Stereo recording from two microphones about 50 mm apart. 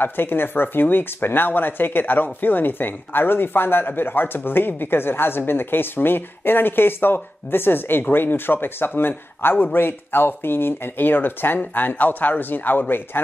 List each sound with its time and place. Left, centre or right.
0.0 s speech: left